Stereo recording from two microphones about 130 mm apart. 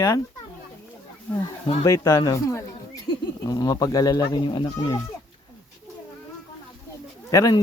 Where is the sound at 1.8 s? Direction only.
25° left (ahead or behind).